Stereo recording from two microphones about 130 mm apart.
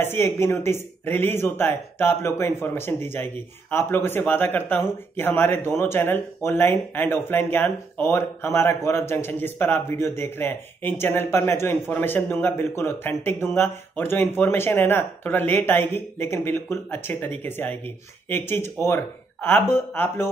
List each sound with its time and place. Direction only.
0.0 s a man's voice: 15° left (ahead or behind)